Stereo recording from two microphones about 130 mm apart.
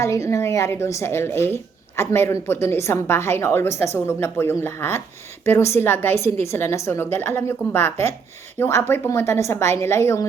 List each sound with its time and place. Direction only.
0.0 s a woman's voice: 25° left (ahead or behind)